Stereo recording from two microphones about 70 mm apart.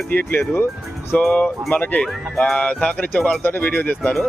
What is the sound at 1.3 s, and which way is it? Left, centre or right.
Speech, left.